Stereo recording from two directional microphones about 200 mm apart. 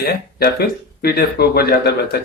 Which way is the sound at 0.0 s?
50° left (ahead or behind).